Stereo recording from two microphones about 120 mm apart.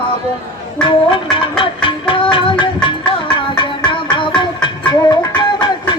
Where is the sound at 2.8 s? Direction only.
45° left (ahead or behind).